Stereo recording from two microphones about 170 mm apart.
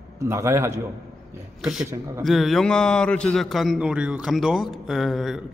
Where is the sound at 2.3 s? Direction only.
Centre (ahead or behind).